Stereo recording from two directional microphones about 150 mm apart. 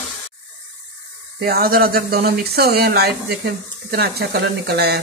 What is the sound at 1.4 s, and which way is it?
Speech, 90° right.